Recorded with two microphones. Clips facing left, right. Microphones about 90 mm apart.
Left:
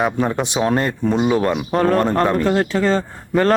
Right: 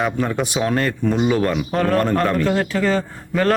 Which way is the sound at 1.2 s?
15° left (ahead or behind).